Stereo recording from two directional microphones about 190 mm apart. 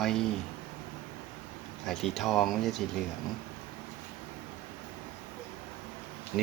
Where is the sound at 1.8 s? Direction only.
Centre (ahead or behind).